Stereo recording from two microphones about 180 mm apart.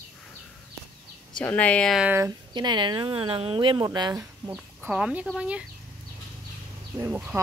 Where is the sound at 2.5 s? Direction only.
25° right (ahead or behind); by 5.6 s 5° right (ahead or behind).